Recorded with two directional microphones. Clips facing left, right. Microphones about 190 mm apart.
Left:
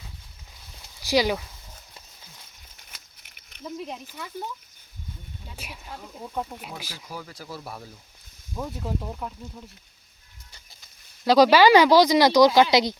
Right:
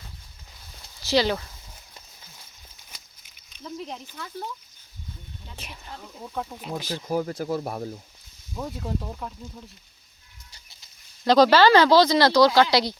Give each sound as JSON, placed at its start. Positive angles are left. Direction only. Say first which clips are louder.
{"t": 1.0, "sound": "speech", "louder": "even", "side_deg": 10}
{"t": 3.2, "sound": "a sound", "louder": "left 3 dB", "side_deg": 60}
{"t": 3.6, "sound": "speech", "louder": "left 1 dB", "side_deg": 15}
{"t": 5.5, "sound": "speech", "louder": "left 1 dB", "side_deg": 10}
{"t": 7.0, "sound": "speech", "louder": "right 12 dB", "side_deg": -45}
{"t": 8.5, "sound": "speech", "louder": "even", "side_deg": 5}
{"t": 11.3, "sound": "speech", "louder": "left 1 dB", "side_deg": 10}